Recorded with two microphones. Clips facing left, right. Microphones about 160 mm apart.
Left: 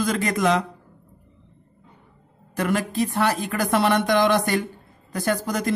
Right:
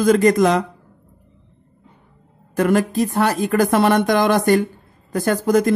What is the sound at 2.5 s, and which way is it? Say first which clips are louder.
Speech: right 7 dB; 45° right (ahead or behind).